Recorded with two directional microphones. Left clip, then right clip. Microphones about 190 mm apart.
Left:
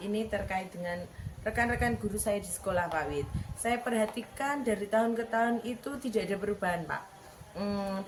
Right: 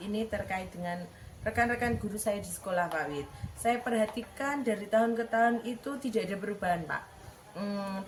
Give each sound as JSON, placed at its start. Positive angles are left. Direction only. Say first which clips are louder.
{"t": 0.1, "sound": "a woman's voice", "louder": "left 1 dB", "side_deg": 15}